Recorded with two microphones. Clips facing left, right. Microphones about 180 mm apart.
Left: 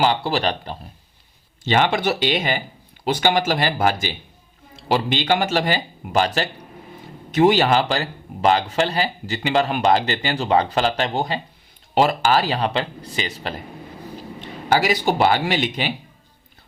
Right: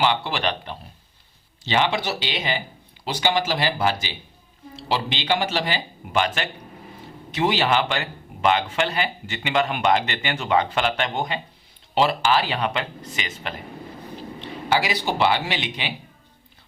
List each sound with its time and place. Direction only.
0.0 s speech: 40° left (ahead or behind)
1.6 s speech: 50° left (ahead or behind)
7.3 s speech: 45° left (ahead or behind)
14.7 s speech: 45° left (ahead or behind)